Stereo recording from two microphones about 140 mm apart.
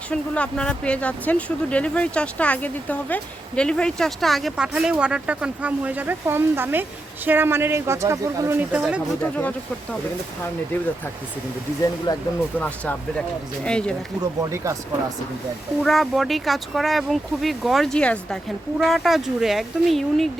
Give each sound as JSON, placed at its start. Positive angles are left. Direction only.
{"t": 0.1, "sound": "speech", "side_deg": 5}
{"t": 9.2, "sound": "speech", "side_deg": 10}
{"t": 12.1, "sound": "speech", "side_deg": 30}
{"t": 12.5, "sound": "speech", "side_deg": 10}
{"t": 14.2, "sound": "speech", "side_deg": -20}
{"t": 15.8, "sound": "speech", "side_deg": 0}